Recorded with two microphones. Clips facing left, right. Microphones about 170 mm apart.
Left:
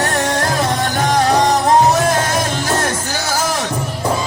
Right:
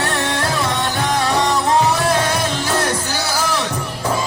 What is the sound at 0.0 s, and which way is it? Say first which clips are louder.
Music: left 3 dB; 45° left (ahead or behind).